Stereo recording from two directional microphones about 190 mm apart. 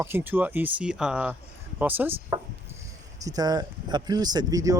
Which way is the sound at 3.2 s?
20° right (ahead or behind).